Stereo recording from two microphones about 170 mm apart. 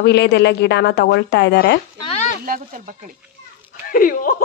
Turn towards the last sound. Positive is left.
turn(degrees=55)  # may be behind; listen again after turning